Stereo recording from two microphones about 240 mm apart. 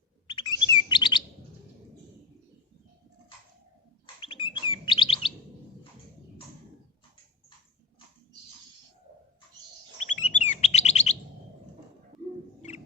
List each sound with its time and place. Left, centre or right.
0.3 s chirp: left
4.0 s chirp: left
10.0 s chirp: left